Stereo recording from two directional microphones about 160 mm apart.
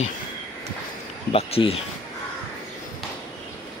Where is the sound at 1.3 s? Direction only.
35° left (ahead or behind).